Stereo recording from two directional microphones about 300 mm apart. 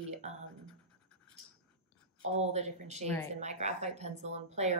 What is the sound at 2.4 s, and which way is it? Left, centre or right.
A woman's voice, right.